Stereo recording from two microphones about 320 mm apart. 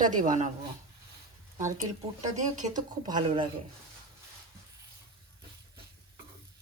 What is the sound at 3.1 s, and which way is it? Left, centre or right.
Speech, centre.